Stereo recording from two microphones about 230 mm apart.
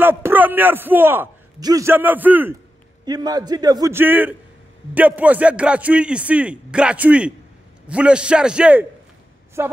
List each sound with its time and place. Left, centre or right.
0.0 s a man's voice: centre